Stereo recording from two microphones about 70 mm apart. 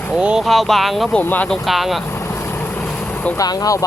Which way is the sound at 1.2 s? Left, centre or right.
Left.